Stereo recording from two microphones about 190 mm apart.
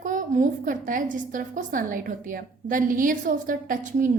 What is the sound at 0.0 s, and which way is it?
A woman's voice, 45° right (ahead or behind).